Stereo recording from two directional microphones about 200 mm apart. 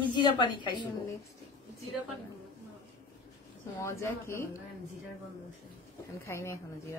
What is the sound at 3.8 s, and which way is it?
Speech, 15° left (ahead or behind).